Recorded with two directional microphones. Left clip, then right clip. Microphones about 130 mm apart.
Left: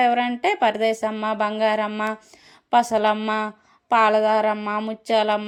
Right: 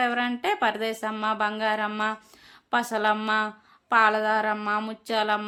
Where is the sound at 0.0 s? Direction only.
30° left (ahead or behind).